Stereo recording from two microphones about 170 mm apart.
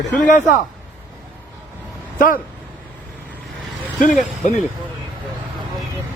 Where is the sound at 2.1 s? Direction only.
55° left (ahead or behind).